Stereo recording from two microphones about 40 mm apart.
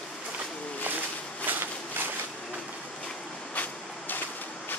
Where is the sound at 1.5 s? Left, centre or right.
Right.